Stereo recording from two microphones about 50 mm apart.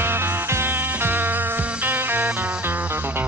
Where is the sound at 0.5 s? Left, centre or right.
Right.